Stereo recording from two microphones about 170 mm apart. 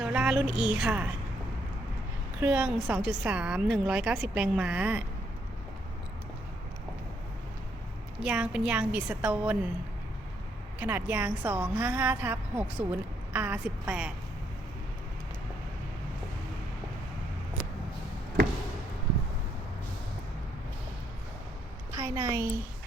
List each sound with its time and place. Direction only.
0.0 s a woman's voice: 5° right (ahead or behind)
2.4 s a woman's voice: 10° right (ahead or behind)
8.2 s a woman's voice: 5° right (ahead or behind)
10.8 s a woman's voice: 10° right (ahead or behind)
21.9 s a woman's voice: 15° right (ahead or behind)